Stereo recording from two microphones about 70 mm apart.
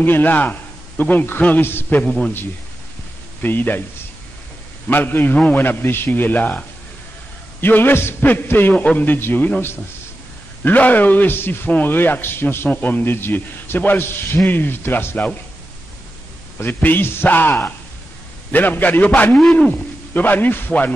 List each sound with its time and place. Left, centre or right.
0.0 s a man's voice: left
2.0 s a man's voice: centre
3.4 s a man's voice: left
4.8 s a man's voice: left
7.6 s a man's voice: left
16.5 s a man's voice: left